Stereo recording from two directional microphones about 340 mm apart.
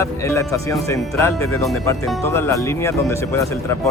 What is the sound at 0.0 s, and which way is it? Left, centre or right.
Speech, centre.